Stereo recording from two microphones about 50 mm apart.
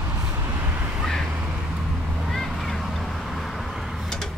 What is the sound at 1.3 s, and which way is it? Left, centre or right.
Vehicle, right.